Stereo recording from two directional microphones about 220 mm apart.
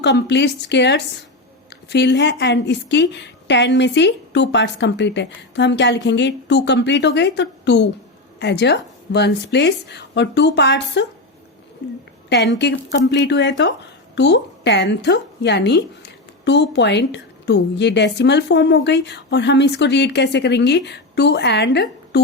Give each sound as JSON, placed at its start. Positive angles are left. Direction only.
{"t": 0.0, "sound": "a woman's voice", "side_deg": 55}
{"t": 12.3, "sound": "a woman's voice", "side_deg": 50}